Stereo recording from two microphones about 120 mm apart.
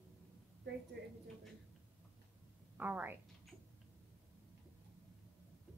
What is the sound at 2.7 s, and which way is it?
Speech, 15° right (ahead or behind).